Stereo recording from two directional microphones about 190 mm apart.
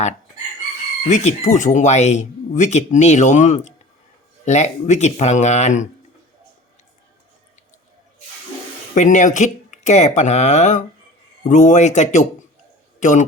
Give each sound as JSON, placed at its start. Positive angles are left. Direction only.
{"t": 1.0, "sound": "speech", "side_deg": 40}
{"t": 9.0, "sound": "a man's voice", "side_deg": 40}